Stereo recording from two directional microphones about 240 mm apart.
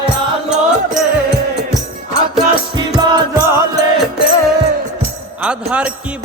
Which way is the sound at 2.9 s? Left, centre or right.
Centre.